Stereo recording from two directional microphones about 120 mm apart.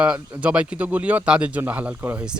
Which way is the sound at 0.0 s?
10° right (ahead or behind).